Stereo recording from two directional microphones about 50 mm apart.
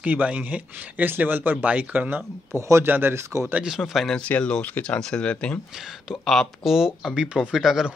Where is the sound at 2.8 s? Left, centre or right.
Right.